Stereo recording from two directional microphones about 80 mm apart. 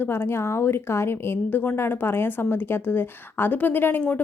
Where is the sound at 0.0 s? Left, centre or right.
Left.